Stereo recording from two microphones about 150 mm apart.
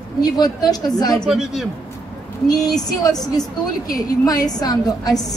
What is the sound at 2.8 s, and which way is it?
A woman's voice, 25° left (ahead or behind).